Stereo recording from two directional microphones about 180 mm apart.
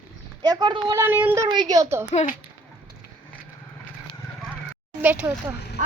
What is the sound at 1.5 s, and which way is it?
Speech, 20° right (ahead or behind).